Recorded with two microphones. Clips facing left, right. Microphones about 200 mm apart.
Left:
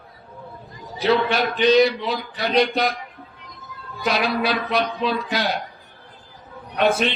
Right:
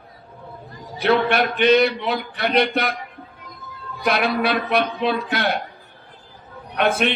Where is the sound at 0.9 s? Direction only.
60° right (ahead or behind).